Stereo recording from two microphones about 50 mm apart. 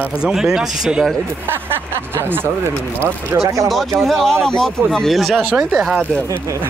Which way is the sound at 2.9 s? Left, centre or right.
Right.